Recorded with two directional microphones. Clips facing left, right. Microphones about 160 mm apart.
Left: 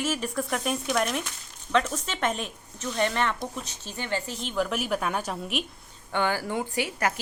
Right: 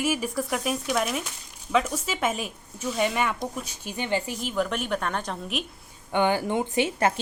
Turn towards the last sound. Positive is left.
turn(degrees=-25)  # may be behind; listen again after turning